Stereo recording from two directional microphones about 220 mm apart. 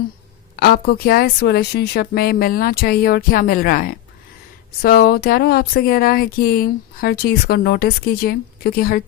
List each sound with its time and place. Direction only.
0.5 s speech: 45° left (ahead or behind)